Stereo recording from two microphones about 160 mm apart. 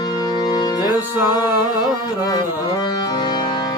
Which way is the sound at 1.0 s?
15° right (ahead or behind).